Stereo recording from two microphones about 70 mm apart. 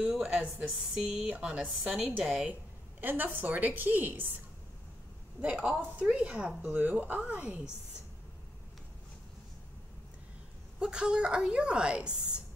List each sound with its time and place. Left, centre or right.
0.0 s a sound: centre
0.9 s a woman's voice: centre
1.3 s a woman's voice: centre
1.9 s a woman's voice: centre
3.0 s a woman's voice: right
5.4 s a woman's voice: centre
10.8 s a woman's voice: centre